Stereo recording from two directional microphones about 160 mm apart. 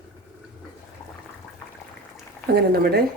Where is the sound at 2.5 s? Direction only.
80° right.